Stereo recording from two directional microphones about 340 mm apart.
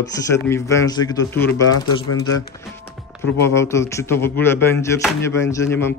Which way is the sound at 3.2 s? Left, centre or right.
Centre.